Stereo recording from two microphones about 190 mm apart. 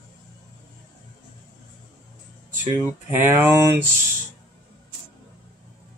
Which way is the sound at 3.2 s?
10° right (ahead or behind).